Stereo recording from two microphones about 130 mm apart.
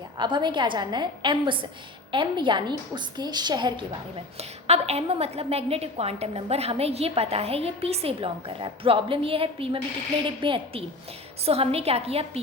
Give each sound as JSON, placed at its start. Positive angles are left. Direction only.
{"t": 0.2, "sound": "a woman's voice", "side_deg": -35}
{"t": 4.4, "sound": "a woman's voice", "side_deg": -55}